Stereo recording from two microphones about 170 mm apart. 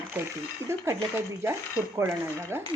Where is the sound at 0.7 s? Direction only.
15° right (ahead or behind).